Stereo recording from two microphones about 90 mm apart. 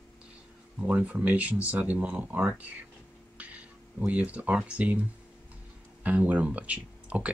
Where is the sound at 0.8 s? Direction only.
15° right (ahead or behind).